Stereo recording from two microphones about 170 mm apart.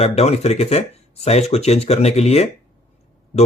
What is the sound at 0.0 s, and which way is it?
Speech, 40° left (ahead or behind).